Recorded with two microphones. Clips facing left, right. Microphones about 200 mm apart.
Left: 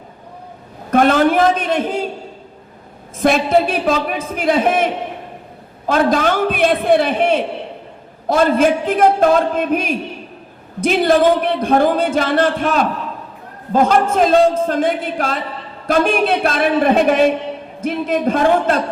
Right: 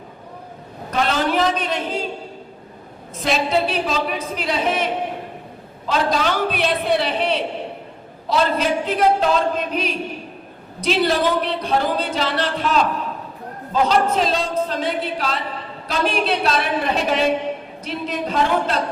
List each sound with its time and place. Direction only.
0.9 s a man's voice: 55° left (ahead or behind)
3.2 s speech: 50° left (ahead or behind)